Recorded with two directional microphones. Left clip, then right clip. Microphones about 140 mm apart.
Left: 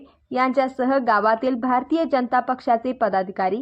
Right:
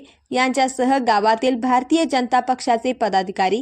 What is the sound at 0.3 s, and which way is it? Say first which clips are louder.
A woman's voice: right 2 dB; 10° right (ahead or behind).